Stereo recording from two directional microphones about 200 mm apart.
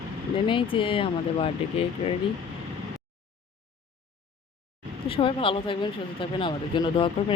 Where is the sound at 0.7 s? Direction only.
25° left (ahead or behind).